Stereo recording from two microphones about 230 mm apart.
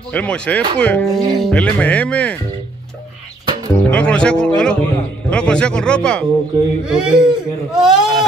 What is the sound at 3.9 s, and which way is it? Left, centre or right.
Speech, centre.